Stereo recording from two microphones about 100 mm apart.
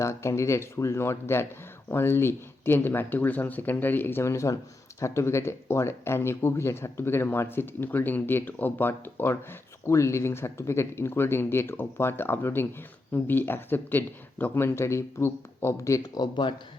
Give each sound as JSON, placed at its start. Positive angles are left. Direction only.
{"t": 0.0, "sound": "speech", "side_deg": 30}